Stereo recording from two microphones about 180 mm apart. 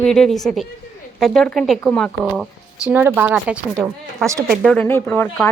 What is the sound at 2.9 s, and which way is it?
Speech, 10° right (ahead or behind).